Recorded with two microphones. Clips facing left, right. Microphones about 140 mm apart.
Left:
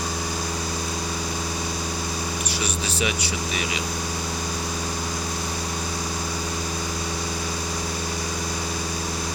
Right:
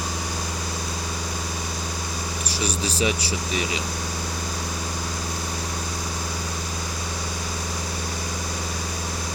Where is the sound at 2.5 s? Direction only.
35° right (ahead or behind).